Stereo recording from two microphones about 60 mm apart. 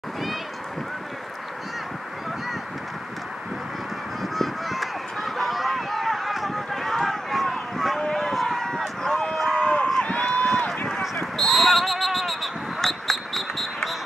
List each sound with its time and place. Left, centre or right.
4.2 s honk: centre
8.1 s a sound: centre
9.6 s run: centre
11.3 s basketball bounce: centre